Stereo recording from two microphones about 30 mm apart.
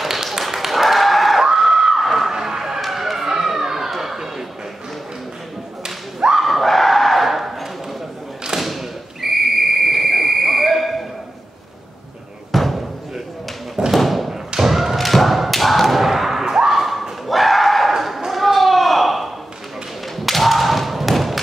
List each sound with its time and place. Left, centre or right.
0.0 s tap: centre
1.4 s a sound: centre
2.0 s a sound: centre
2.3 s vehicle: centre
2.8 s emergency vehicle: centre
3.9 s a sound: centre
6.4 s dog: centre
8.5 s whistle: centre
12.5 s slam: centre
13.9 s thump: centre
15.0 s thump: centre
16.8 s dog: centre
17.9 s a sound: centre
20.2 s thump: centre